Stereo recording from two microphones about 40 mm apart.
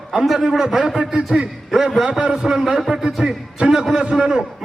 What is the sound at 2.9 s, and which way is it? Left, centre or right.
A man's voice, centre.